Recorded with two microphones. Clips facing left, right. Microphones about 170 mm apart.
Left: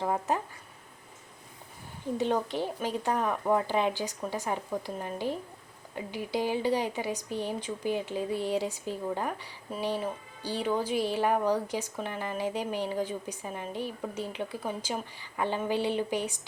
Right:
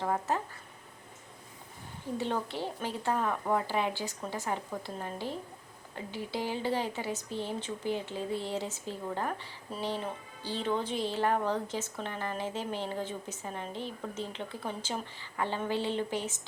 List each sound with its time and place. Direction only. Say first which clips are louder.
0.0 s a woman's voice: left 2 dB; 15° left (ahead or behind)
2.1 s a woman's voice: left 5 dB; 15° left (ahead or behind)